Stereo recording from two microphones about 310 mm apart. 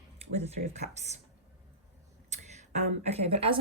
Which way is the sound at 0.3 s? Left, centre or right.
Centre.